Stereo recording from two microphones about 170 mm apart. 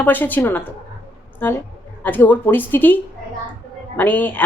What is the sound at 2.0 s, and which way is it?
A woman's voice, 10° left (ahead or behind).